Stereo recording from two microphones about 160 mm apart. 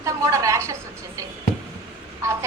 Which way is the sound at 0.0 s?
20° right (ahead or behind).